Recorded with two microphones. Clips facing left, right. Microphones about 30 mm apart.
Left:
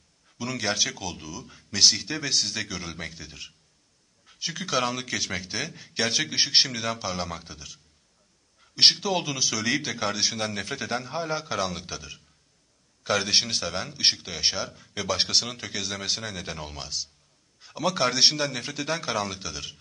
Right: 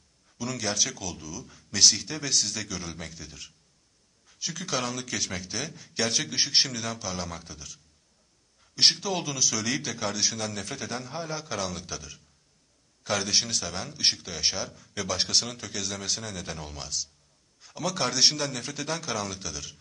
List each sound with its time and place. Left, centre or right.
0.4 s a man's voice: left